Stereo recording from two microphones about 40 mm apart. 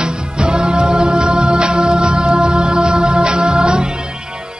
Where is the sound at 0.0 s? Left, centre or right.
Right.